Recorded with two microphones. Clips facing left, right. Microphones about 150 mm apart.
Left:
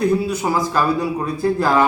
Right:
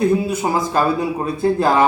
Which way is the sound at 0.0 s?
25° right (ahead or behind).